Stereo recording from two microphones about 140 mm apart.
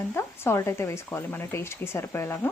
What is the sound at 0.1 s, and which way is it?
Speech, 15° left (ahead or behind).